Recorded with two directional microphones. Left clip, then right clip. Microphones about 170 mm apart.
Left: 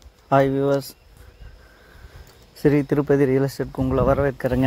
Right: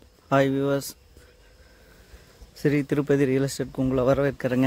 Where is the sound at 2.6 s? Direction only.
15° right (ahead or behind).